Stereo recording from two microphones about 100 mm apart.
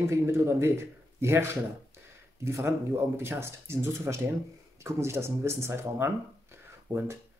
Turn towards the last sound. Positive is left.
turn(degrees=-25)  # may be behind; listen again after turning